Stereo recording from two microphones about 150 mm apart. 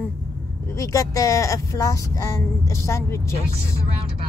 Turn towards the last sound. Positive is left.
turn(degrees=20)  # may be behind; listen again after turning